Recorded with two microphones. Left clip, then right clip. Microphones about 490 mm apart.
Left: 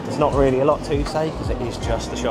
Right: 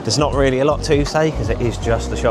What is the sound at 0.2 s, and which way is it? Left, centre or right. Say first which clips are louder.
Speech: even; right.